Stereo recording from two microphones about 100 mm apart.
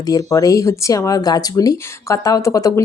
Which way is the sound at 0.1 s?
35° left (ahead or behind).